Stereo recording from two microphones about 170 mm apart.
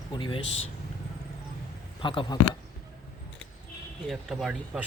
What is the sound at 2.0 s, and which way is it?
Speech, 30° left (ahead or behind).